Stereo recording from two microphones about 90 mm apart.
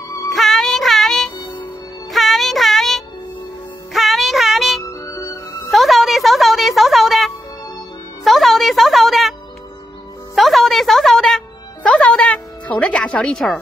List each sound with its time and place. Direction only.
0.3 s music: centre (ahead or behind)
4.8 s music: 40° left (ahead or behind)
5.7 s music: centre (ahead or behind)
10.3 s music: centre (ahead or behind)